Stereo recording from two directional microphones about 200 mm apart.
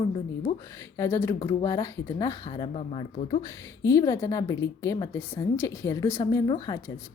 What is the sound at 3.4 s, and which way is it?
A woman's voice, 15° left (ahead or behind).